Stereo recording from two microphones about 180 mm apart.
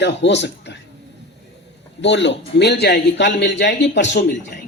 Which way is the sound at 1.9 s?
85° left.